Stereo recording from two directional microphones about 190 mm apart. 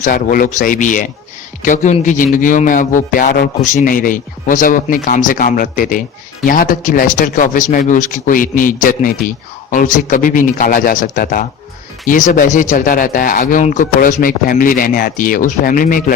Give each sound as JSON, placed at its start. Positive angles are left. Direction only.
{"t": 0.0, "sound": "speech", "side_deg": 45}